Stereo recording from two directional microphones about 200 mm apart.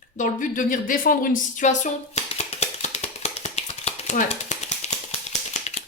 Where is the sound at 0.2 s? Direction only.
40° left (ahead or behind).